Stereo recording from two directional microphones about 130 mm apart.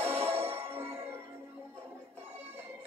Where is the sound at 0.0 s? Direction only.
20° right (ahead or behind).